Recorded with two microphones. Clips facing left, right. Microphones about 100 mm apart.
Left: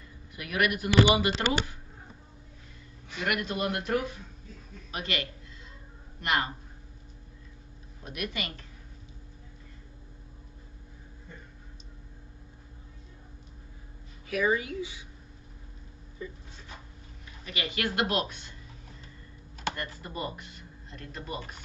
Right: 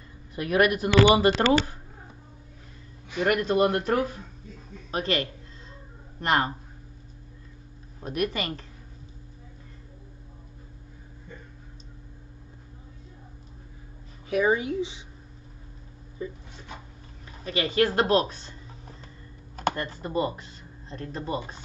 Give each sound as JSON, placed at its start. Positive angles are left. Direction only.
{"t": 0.4, "sound": "speech", "side_deg": -35}
{"t": 3.2, "sound": "speech", "side_deg": -35}
{"t": 8.0, "sound": "speech", "side_deg": -40}
{"t": 14.3, "sound": "a woman's voice", "side_deg": -25}
{"t": 16.2, "sound": "a woman's voice", "side_deg": -25}
{"t": 17.5, "sound": "speech", "side_deg": -35}